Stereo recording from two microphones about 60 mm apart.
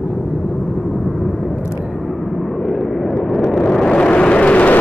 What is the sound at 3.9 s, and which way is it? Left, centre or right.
Vehicle, centre.